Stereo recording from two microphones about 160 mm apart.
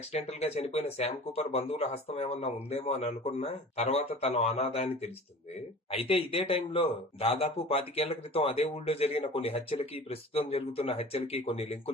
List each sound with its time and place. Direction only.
0.1 s a man's voice: 40° left (ahead or behind)